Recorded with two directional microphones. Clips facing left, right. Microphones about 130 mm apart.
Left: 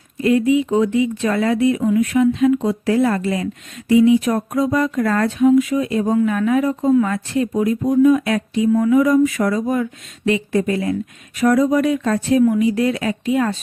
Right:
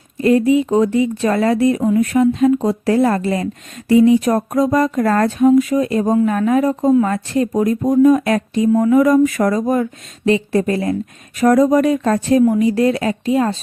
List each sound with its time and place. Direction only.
0.2 s speech: 35° right (ahead or behind)